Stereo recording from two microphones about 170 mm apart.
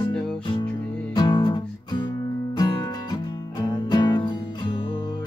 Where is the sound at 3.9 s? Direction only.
25° left (ahead or behind).